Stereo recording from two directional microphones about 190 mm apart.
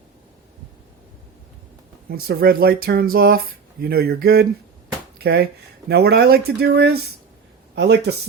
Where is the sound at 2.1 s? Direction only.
55° right (ahead or behind).